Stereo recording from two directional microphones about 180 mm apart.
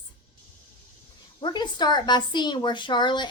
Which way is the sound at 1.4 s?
25° left (ahead or behind).